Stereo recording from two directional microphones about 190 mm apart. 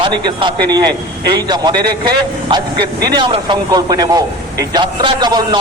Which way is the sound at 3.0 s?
20° right (ahead or behind).